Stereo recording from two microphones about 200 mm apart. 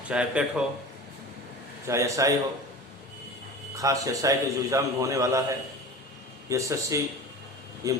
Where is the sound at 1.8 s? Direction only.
15° right (ahead or behind).